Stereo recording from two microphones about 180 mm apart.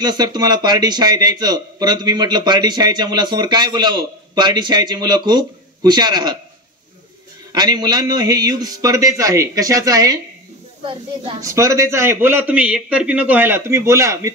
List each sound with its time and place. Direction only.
0.0 s a man's voice: 25° right (ahead or behind)
7.5 s a man's voice: 20° right (ahead or behind)
11.4 s a man's voice: 15° right (ahead or behind)